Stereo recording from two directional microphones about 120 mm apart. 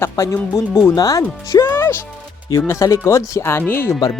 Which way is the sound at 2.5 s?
25° left (ahead or behind).